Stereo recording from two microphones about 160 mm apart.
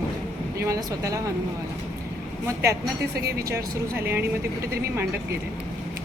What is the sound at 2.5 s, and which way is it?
Speech, 15° right (ahead or behind).